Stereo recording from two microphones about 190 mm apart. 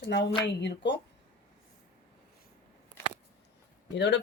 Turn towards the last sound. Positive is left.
turn(degrees=65)  # may be behind; listen again after turning